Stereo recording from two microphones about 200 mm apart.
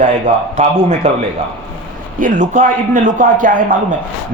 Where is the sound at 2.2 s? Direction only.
40° right (ahead or behind).